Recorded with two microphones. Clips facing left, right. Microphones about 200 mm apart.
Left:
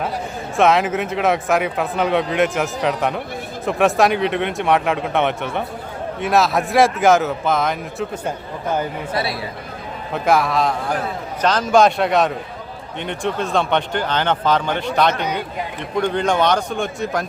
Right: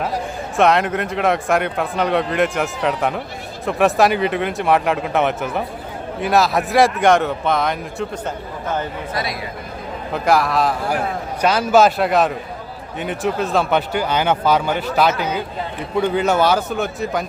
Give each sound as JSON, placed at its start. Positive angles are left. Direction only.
{"t": 0.5, "sound": "speech", "side_deg": 0}
{"t": 9.1, "sound": "speech", "side_deg": 30}
{"t": 10.1, "sound": "speech", "side_deg": 0}